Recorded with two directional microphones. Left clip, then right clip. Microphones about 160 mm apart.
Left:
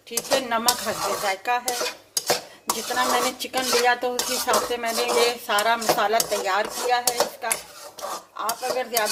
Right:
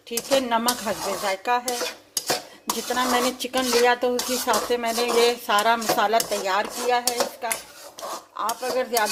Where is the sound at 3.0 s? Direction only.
50° right (ahead or behind).